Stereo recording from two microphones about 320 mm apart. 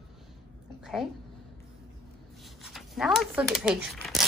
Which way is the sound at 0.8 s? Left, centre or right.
Centre.